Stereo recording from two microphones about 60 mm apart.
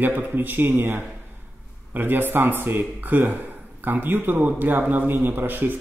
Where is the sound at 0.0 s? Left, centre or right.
Right.